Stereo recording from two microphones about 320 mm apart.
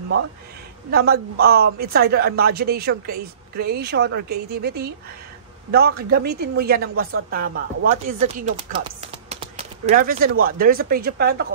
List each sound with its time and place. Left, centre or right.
0.9 s a woman's voice: right